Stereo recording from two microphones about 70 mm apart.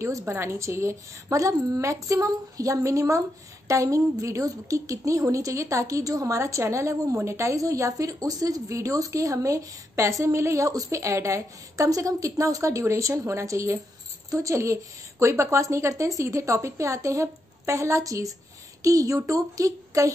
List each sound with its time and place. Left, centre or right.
0.0 s speech: right